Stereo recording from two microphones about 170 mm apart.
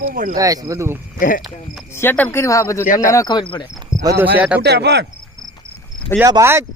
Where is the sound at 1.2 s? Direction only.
55° left (ahead or behind).